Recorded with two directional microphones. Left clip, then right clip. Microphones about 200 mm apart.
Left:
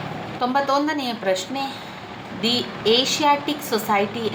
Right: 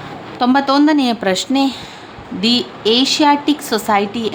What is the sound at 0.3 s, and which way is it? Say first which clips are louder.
A woman's voice: right 7 dB; 50° right (ahead or behind).